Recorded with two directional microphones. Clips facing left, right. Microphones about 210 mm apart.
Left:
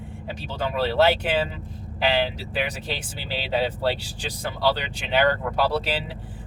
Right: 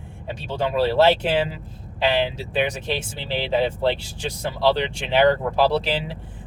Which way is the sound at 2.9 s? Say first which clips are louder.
Right 5 dB; 25° right (ahead or behind).